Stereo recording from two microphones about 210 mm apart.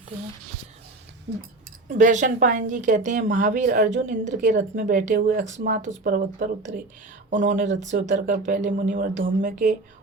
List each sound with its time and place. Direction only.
1.3 s speech: 55° right (ahead or behind)
1.9 s a woman's voice: 35° right (ahead or behind)